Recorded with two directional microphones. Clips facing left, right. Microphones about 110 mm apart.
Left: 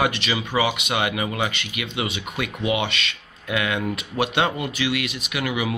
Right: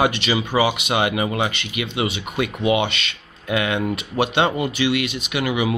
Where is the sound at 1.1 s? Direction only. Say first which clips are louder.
Right 3 dB; 15° right (ahead or behind).